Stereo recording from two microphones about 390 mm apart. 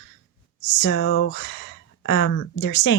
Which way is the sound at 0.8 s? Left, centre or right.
Left.